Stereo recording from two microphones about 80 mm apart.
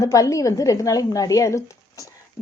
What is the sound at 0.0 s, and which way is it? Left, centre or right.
A woman's voice, left.